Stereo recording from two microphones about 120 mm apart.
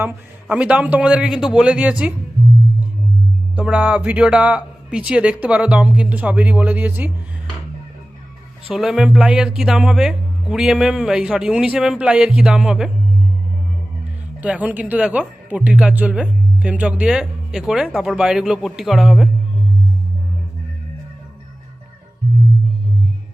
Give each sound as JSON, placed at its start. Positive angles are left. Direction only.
{"t": 0.0, "sound": "speech", "side_deg": -10}
{"t": 3.5, "sound": "speech", "side_deg": -10}
{"t": 8.7, "sound": "speech", "side_deg": -5}
{"t": 14.4, "sound": "speech", "side_deg": -10}